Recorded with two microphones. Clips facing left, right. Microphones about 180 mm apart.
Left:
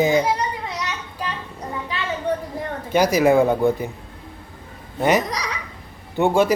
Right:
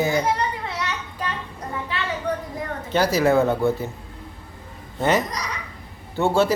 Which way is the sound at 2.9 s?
15° left (ahead or behind).